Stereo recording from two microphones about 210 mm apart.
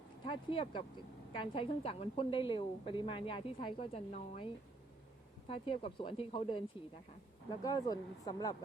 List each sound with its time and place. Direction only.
0.3 s a woman's voice: 25° left (ahead or behind)